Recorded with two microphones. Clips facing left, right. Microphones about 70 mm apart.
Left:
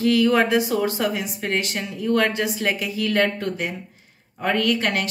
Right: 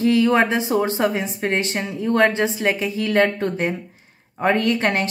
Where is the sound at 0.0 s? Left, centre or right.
Right.